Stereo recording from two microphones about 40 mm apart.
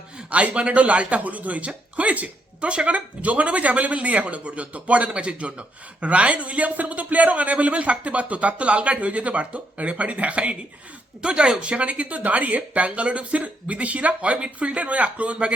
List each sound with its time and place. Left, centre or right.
0.3 s speech: right